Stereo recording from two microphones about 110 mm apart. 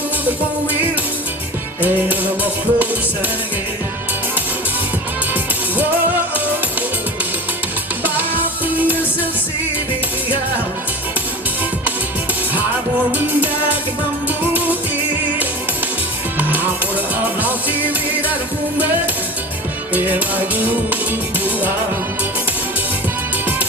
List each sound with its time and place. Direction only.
1.8 s music: 15° right (ahead or behind)
8.6 s music: 15° right (ahead or behind)
13.1 s music: 15° right (ahead or behind)
16.4 s music: 15° right (ahead or behind)
19.9 s music: 15° right (ahead or behind)